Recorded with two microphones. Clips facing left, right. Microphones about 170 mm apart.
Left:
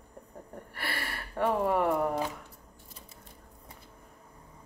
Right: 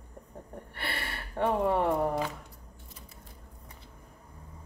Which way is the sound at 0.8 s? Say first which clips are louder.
Even; 25° right (ahead or behind).